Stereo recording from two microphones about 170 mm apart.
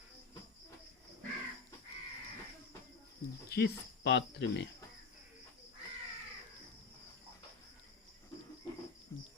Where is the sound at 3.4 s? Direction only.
75° left (ahead or behind).